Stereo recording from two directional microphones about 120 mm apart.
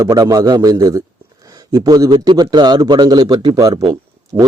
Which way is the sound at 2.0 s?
40° right (ahead or behind).